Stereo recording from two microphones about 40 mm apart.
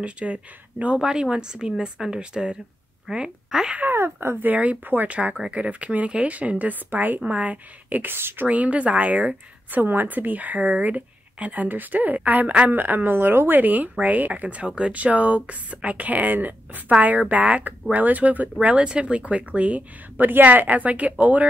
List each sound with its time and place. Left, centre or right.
0.0 s speech: right
0.9 s a woman's voice: centre
3.9 s speech: right
5.0 s speech: right
7.2 s speech: right
8.0 s speech: right
8.5 s speech: right
9.8 s a woman's voice: right
13.6 s speech: right
20.2 s speech: right